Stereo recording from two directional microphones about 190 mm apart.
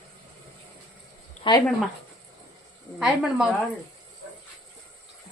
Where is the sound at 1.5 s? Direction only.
25° left (ahead or behind).